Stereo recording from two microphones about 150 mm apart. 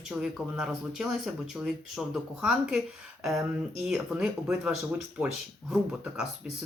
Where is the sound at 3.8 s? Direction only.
5° right (ahead or behind).